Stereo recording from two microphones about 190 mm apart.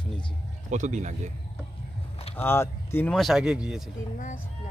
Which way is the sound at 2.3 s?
10° left (ahead or behind).